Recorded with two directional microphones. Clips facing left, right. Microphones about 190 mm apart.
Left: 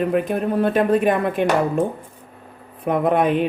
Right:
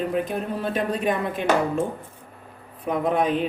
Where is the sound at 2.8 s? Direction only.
60° left (ahead or behind).